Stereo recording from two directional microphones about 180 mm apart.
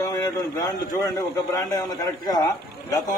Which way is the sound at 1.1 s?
20° left (ahead or behind).